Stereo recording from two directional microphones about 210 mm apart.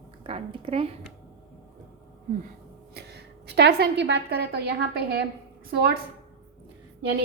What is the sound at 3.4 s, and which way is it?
A woman's voice, 50° right (ahead or behind).